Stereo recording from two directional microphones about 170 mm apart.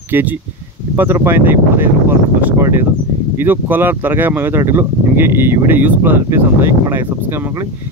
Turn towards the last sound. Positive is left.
turn(degrees=-15)  # may be behind; listen again after turning